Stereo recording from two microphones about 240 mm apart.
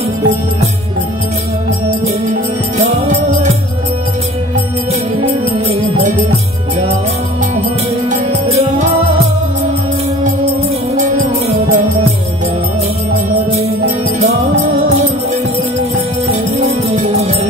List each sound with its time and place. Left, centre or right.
2.8 s music: right
5.7 s music: right
8.1 s music: right
11.0 s music: right
13.1 s music: right
16.9 s music: right